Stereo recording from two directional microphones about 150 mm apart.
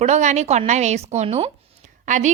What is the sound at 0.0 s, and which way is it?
A woman's voice, 50° right (ahead or behind).